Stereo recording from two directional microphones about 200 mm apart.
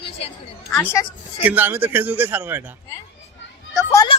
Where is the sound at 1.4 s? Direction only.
10° right (ahead or behind).